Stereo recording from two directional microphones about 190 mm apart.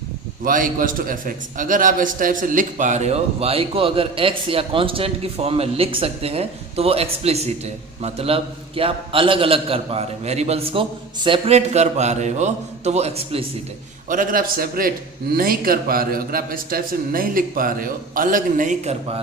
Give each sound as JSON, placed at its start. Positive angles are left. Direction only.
{"t": 0.4, "sound": "a man's voice", "side_deg": -45}
{"t": 14.1, "sound": "a man's voice", "side_deg": -45}